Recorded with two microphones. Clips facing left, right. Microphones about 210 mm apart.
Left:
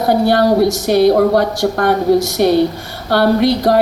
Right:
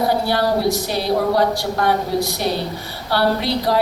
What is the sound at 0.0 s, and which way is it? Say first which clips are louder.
Speech: left 6 dB; 50° left (ahead or behind).